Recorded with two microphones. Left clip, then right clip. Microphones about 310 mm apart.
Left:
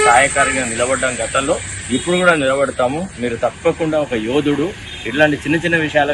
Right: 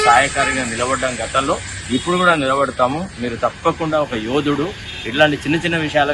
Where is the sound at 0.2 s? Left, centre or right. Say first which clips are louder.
Left 2 dB; centre.